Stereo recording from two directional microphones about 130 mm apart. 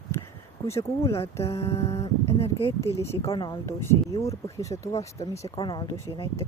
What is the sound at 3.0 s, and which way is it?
Speech, 20° left (ahead or behind).